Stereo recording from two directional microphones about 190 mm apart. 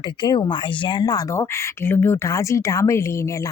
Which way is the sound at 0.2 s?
25° left (ahead or behind).